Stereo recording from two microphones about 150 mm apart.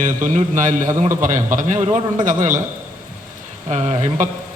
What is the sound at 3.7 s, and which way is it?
Speech, 50° right (ahead or behind).